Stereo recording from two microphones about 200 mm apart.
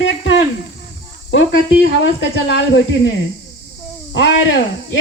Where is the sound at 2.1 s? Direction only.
65° left (ahead or behind).